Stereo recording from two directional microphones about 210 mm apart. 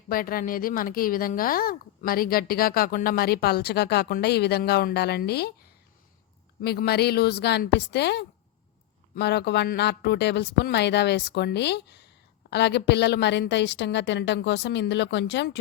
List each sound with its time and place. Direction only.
0.1 s speech: 45° left (ahead or behind)
6.6 s a woman's voice: 50° left (ahead or behind)